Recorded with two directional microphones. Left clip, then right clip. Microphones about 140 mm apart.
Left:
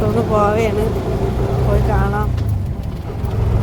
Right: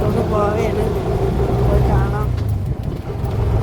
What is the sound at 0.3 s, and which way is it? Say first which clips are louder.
Vehicle: left 4 dB; 25° left (ahead or behind).